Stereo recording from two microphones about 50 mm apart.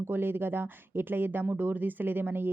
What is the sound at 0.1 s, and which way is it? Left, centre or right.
Speech, right.